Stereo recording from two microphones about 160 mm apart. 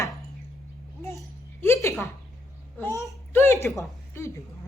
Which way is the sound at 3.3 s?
15° left (ahead or behind).